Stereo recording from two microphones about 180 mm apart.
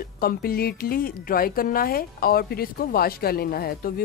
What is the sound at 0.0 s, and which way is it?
Speech, 55° left (ahead or behind).